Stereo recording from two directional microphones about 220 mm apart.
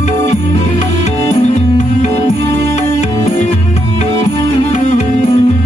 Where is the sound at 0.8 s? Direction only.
30° left (ahead or behind).